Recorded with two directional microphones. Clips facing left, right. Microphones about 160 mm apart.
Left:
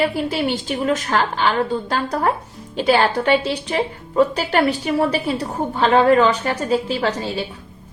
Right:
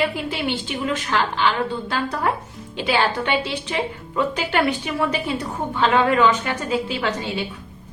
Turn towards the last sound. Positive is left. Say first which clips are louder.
# left 3 dB
turn(degrees=35)  # may be behind; listen again after turning